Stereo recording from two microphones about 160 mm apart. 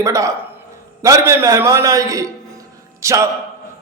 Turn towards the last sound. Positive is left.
turn(degrees=-20)  # may be behind; listen again after turning